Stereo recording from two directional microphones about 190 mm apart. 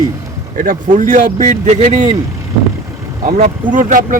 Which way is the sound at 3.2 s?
40° right (ahead or behind).